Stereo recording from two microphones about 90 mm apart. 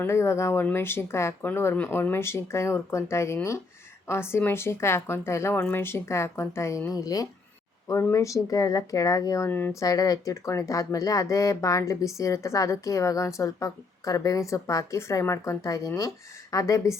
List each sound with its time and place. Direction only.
0.0 s speech: 30° left (ahead or behind)
9.5 s speech: 20° left (ahead or behind)
9.8 s speech: 40° left (ahead or behind)